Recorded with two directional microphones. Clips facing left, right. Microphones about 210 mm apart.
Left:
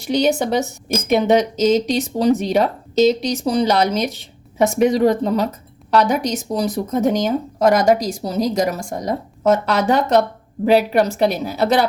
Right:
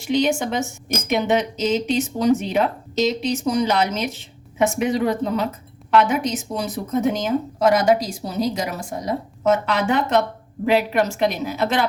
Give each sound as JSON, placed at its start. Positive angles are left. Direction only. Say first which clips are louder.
{"t": 0.1, "sound": "speech", "louder": "left 3 dB", "side_deg": 35}